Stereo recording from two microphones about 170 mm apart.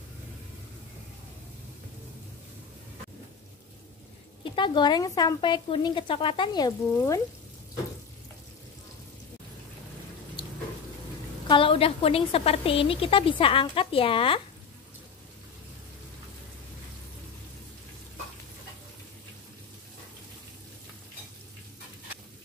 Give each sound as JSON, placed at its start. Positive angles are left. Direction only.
{"t": 4.6, "sound": "speech", "side_deg": 25}
{"t": 11.4, "sound": "a woman's voice", "side_deg": 30}